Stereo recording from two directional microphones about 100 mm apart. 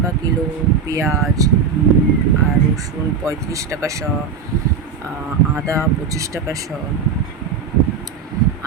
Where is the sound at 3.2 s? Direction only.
30° right (ahead or behind).